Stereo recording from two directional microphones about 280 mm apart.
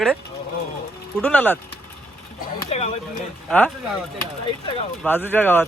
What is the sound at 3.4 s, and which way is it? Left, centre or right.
Speech, centre.